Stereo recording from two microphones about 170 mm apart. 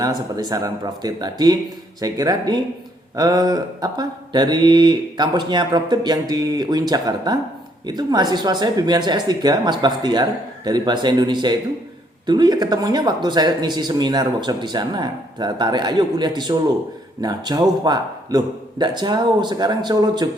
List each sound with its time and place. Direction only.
0.0 s speech: 20° right (ahead or behind)